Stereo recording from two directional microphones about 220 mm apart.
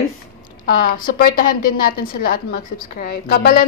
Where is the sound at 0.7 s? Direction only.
40° left (ahead or behind).